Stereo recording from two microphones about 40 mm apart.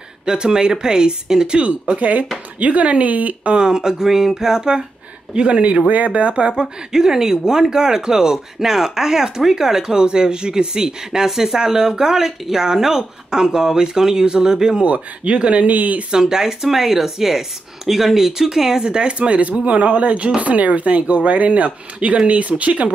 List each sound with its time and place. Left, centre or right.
0.2 s speech: centre
1.6 s speech: right
3.5 s speech: centre
14.8 s speech: right
16.1 s speech: centre
18.9 s speech: right